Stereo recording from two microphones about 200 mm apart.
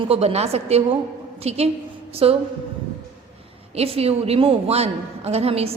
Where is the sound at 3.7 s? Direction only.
30° right (ahead or behind).